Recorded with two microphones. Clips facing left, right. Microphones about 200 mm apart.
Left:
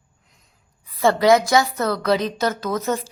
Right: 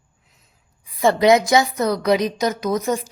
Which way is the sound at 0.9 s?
20° right (ahead or behind).